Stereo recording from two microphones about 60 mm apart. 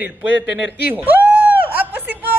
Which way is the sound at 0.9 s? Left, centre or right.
Right.